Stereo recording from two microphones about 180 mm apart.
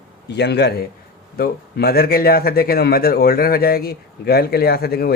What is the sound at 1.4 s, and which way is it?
Speech, 60° left (ahead or behind).